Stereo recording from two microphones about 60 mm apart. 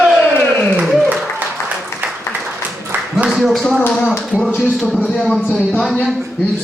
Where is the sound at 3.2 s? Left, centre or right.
Centre.